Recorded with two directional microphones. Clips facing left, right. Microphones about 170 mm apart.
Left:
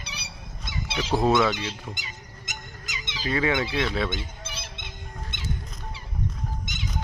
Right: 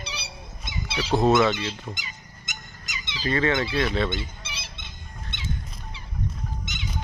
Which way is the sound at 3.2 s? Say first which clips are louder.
Right 1 dB; 10° left (ahead or behind).